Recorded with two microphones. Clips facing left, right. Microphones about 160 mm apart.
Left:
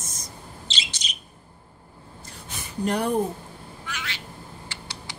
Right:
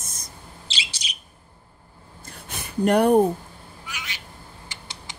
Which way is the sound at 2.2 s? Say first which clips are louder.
Right 2 dB; 60° right (ahead or behind).